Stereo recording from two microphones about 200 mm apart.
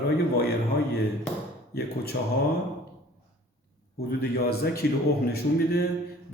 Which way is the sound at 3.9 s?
50° left (ahead or behind).